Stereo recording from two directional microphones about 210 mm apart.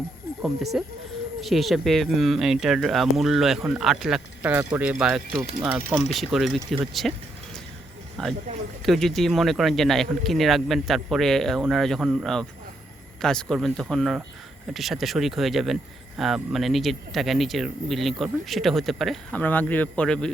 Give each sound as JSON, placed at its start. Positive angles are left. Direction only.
{"t": 0.4, "sound": "speech", "side_deg": 0}
{"t": 8.2, "sound": "speech", "side_deg": 0}